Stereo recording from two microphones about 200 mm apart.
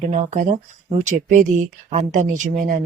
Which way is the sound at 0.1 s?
35° right (ahead or behind).